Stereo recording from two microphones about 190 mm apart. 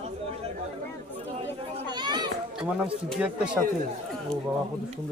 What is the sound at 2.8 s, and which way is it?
Speech, 5° right (ahead or behind).